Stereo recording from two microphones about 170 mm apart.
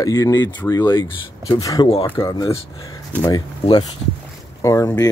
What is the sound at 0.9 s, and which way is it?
Speech, 25° left (ahead or behind).